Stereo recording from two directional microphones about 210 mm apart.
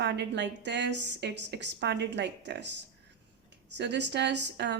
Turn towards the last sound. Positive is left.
turn(degrees=-55)  # may be behind; listen again after turning